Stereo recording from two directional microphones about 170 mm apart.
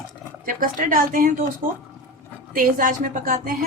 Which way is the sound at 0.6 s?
50° right (ahead or behind).